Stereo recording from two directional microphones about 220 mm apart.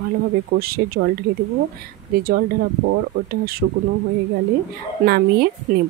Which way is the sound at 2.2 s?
45° right (ahead or behind).